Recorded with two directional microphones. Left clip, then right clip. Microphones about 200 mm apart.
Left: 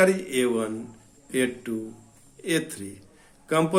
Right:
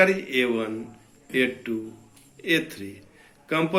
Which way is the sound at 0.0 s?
55° left (ahead or behind).